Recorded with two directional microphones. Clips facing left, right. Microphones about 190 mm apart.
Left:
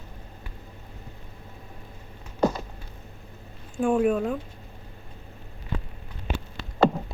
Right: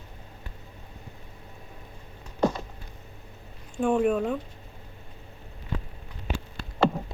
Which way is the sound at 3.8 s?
Centre (ahead or behind).